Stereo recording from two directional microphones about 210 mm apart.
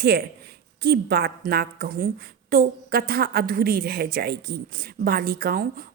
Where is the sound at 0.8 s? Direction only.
45° right (ahead or behind).